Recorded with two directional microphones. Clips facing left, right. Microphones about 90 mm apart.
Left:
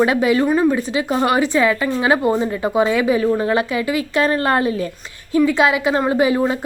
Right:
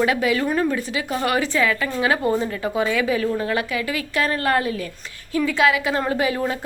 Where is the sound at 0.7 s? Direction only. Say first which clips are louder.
Left 5 dB; 25° left (ahead or behind).